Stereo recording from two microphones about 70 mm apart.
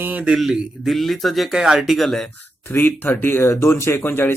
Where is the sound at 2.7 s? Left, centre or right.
Left.